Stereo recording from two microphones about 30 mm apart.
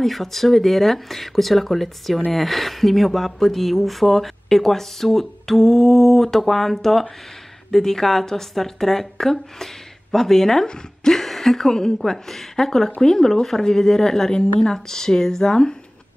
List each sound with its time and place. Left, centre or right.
0.0 s a woman's voice: centre